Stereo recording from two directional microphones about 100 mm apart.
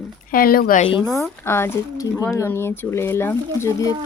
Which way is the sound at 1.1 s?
25° left (ahead or behind).